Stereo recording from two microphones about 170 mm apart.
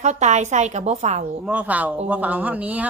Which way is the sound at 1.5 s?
10° right (ahead or behind).